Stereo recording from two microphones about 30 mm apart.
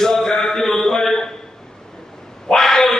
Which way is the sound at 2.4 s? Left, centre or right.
Centre.